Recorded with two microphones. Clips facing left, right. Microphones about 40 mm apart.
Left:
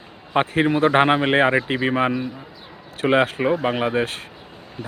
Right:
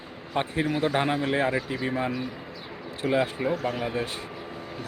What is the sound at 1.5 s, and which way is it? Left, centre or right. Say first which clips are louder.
Speech: left 8 dB; left.